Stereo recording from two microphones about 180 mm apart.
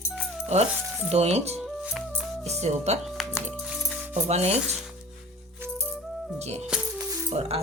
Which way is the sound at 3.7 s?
5° right (ahead or behind).